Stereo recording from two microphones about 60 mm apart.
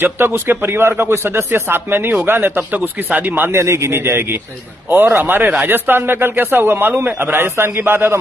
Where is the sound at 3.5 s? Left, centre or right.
Right.